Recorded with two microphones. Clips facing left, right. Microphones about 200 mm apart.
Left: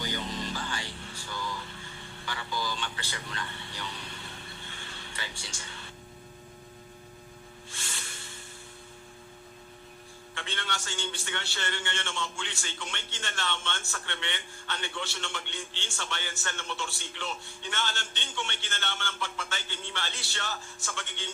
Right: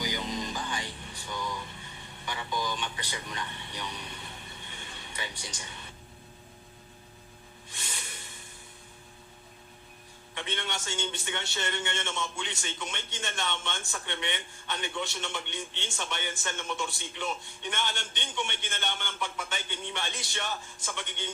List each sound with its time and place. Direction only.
0.0 s music: 15° right (ahead or behind)
2.2 s speech: 20° right (ahead or behind)
4.7 s a sound: 15° right (ahead or behind)
5.4 s a man's voice: 20° right (ahead or behind)
7.7 s music: 20° right (ahead or behind)
10.3 s a man's voice: 20° right (ahead or behind)